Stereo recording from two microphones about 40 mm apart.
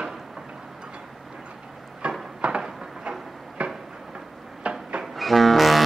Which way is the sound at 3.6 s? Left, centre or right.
Right.